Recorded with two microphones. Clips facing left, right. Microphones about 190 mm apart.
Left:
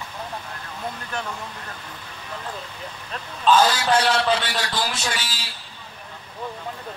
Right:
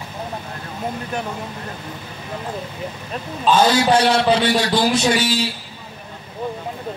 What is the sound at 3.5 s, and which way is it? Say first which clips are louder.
A man's voice: right 3 dB; 25° right (ahead or behind).